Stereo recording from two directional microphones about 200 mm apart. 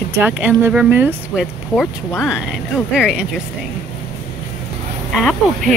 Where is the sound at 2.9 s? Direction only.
5° right (ahead or behind).